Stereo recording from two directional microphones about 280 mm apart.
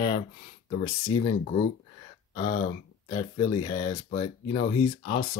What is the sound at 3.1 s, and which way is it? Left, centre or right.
Speech, centre.